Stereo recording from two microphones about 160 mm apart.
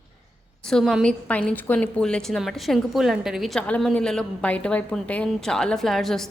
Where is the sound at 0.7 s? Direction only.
Centre (ahead or behind).